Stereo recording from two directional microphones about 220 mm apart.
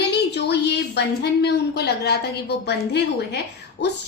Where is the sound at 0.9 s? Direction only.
50° left (ahead or behind).